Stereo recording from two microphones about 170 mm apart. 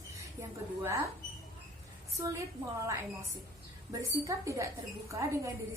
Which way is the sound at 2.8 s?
15° right (ahead or behind).